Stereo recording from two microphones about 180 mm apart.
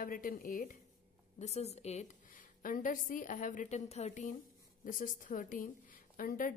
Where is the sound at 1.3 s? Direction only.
35° left (ahead or behind).